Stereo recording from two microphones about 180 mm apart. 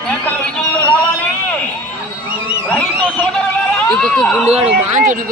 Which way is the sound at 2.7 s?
10° left (ahead or behind).